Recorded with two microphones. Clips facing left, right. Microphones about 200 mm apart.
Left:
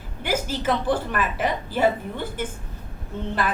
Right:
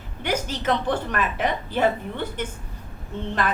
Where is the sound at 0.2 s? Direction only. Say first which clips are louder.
Left 1 dB; 5° left (ahead or behind).